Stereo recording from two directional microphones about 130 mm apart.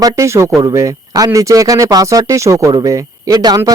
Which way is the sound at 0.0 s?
25° right (ahead or behind).